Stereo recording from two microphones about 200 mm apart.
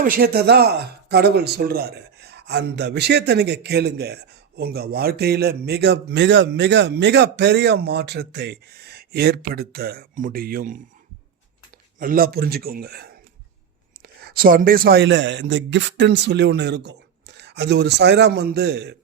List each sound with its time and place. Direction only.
0.0 s speech: 45° right (ahead or behind)
11.9 s a man's voice: 45° right (ahead or behind)